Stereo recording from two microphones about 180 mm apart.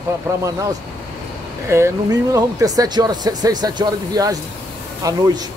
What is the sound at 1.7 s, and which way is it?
Speech, 15° right (ahead or behind).